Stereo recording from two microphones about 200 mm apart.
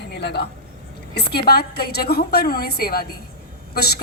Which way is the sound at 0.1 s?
55° left (ahead or behind).